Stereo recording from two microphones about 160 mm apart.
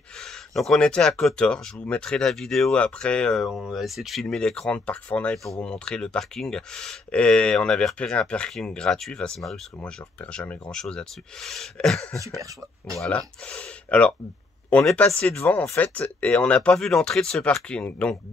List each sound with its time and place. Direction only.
0.2 s speech: 5° left (ahead or behind)
12.4 s speech: 20° right (ahead or behind)
13.0 s speech: 5° left (ahead or behind)